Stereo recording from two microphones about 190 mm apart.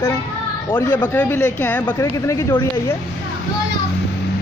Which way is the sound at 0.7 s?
10° left (ahead or behind).